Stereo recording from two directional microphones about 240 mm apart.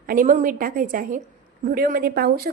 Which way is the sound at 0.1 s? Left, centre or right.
Right.